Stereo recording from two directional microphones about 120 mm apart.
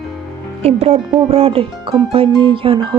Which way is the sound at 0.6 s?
60° right (ahead or behind).